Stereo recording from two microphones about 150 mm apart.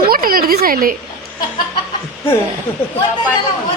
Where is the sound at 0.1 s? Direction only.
75° right (ahead or behind).